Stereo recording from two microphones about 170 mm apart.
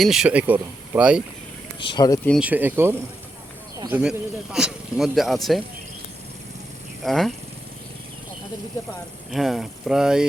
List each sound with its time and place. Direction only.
0.0 s speech: 5° right (ahead or behind)
1.8 s speech: 25° left (ahead or behind)
2.4 s speech: 10° right (ahead or behind)
7.0 s speech: centre (ahead or behind)
9.3 s speech: centre (ahead or behind)